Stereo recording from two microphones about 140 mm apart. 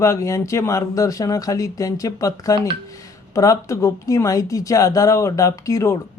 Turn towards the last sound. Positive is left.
turn(degrees=20)  # may be behind; listen again after turning